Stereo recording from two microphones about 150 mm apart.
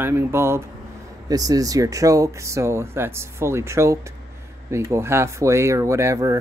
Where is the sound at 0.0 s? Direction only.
15° right (ahead or behind).